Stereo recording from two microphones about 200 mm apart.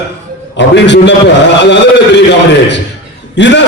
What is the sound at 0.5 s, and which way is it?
Speech, 60° left (ahead or behind).